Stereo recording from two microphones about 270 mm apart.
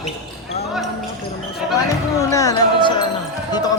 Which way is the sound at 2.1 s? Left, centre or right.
Centre.